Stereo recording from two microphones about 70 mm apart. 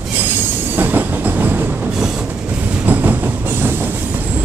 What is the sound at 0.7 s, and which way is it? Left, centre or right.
Train, right.